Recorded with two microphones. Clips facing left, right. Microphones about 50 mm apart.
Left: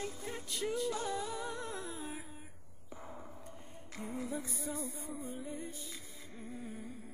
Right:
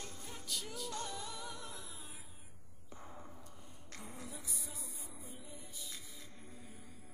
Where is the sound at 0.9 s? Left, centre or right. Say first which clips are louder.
Left 7 dB; centre.